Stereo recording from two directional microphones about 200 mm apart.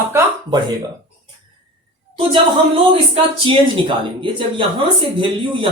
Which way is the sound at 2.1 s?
25° right (ahead or behind).